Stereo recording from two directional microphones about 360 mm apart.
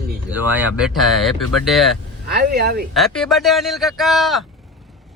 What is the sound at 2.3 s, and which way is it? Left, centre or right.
Speech, right.